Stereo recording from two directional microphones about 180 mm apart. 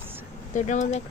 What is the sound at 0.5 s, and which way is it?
Speech, 40° left (ahead or behind).